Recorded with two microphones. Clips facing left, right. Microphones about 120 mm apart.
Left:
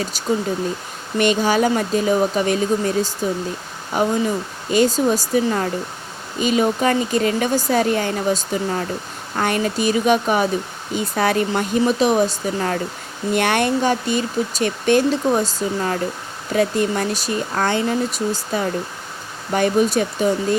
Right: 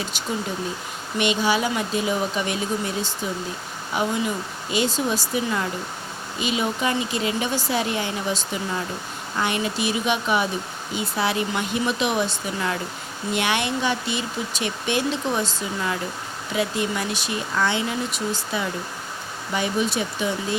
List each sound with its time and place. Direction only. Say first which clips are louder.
1.2 s speech: left 5 dB; 45° left (ahead or behind)